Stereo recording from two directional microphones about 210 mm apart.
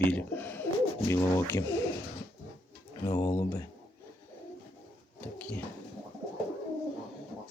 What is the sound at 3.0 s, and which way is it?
Speech, 20° left (ahead or behind).